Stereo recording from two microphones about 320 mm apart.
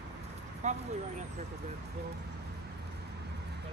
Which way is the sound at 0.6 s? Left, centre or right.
Right.